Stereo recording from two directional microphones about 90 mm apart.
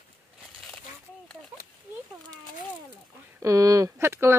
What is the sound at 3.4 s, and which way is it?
Speech, 40° right (ahead or behind).